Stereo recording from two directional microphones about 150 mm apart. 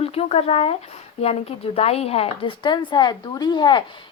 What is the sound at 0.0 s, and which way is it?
Speech, 40° left (ahead or behind).